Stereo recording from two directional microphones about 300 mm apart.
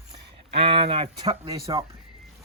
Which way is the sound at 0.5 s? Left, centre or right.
Centre.